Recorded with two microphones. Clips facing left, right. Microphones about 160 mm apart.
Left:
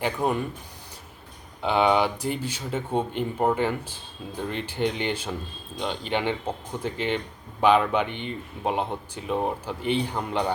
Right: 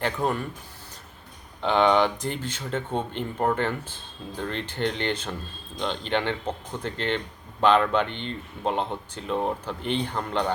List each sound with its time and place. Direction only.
0.0 s speech: 10° left (ahead or behind)
1.6 s speech: 10° left (ahead or behind)